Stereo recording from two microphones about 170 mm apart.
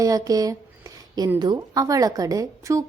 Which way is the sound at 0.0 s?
20° right (ahead or behind).